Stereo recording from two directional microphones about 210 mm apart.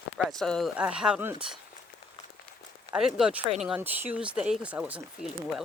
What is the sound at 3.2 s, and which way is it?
Speech, 5° right (ahead or behind).